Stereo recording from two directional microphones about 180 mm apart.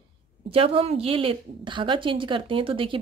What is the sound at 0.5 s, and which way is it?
A woman's voice, 30° right (ahead or behind).